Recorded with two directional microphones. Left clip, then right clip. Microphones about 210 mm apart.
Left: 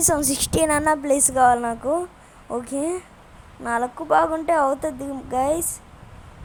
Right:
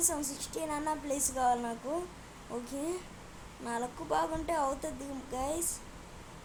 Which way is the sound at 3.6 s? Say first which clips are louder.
Left 13 dB; 30° left (ahead or behind).